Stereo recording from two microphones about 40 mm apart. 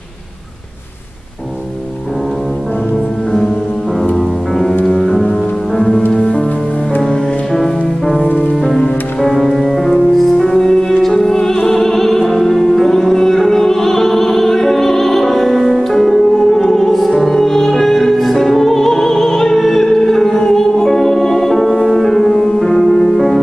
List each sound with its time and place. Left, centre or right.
4.8 s music: centre
6.1 s music: left
7.0 s music: centre
9.3 s music: centre